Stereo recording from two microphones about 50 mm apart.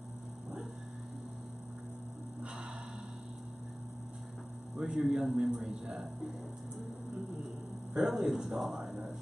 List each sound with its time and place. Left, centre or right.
4.7 s a man's voice: right
5.0 s speech: centre
8.0 s speech: centre